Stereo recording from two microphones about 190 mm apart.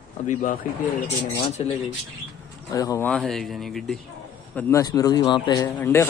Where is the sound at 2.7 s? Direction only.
15° left (ahead or behind).